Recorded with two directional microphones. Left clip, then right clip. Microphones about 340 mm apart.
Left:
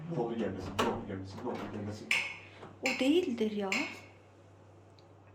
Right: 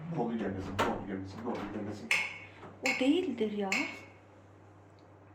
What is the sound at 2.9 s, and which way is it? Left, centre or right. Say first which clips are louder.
Speech: left 2 dB; centre.